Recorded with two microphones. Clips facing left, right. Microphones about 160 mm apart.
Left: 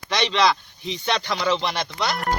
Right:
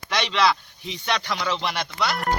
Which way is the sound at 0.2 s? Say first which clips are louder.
Left 1 dB; 10° right (ahead or behind).